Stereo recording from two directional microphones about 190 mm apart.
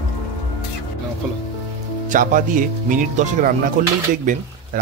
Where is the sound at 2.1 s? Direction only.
45° right (ahead or behind).